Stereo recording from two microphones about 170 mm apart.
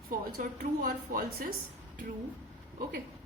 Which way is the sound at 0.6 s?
55° right (ahead or behind).